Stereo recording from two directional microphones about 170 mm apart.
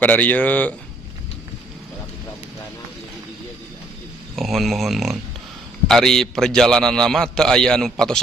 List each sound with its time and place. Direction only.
0.0 s speech: 10° left (ahead or behind)
4.4 s a man's voice: centre (ahead or behind)